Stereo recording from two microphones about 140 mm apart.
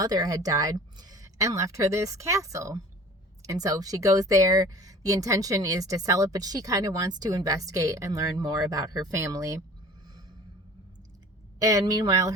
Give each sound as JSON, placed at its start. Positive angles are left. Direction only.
{"t": 0.0, "sound": "speech", "side_deg": -25}
{"t": 11.6, "sound": "speech", "side_deg": -25}